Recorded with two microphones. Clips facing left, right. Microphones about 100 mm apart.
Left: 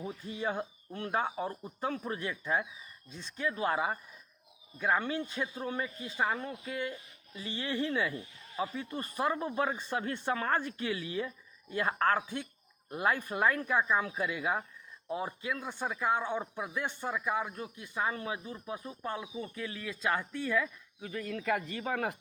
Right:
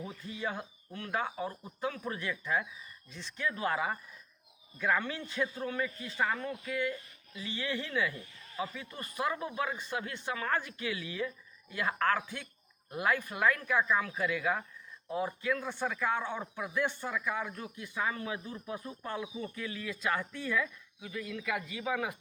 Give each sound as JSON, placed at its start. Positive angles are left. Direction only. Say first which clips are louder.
{"t": 0.3, "sound": "a man's voice", "louder": "left 3 dB", "side_deg": 25}